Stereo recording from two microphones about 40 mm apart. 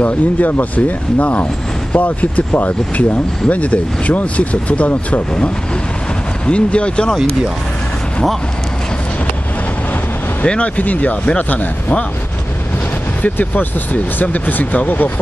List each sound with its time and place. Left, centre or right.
0.0 s speech: left
6.4 s speech: left
10.4 s speech: left
10.8 s speech: left
13.2 s speech: left